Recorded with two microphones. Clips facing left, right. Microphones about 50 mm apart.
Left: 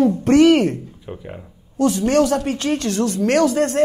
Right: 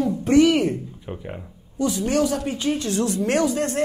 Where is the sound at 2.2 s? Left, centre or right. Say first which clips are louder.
Left 3 dB; left.